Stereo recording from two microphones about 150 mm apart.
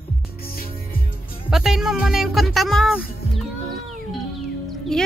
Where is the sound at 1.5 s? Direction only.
5° right (ahead or behind).